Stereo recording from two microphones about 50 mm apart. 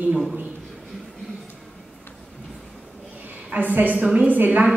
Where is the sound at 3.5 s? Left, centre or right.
Right.